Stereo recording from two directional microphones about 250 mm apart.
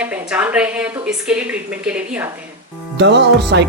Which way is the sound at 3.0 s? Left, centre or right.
Right.